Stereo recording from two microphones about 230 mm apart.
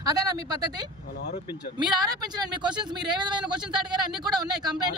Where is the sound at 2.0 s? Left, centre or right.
Centre.